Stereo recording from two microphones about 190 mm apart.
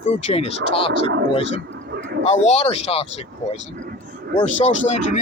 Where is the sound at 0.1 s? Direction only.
35° left (ahead or behind).